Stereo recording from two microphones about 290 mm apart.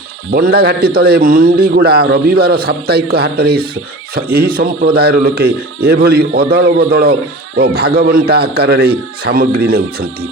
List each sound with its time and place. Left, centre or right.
0.3 s a man's voice: right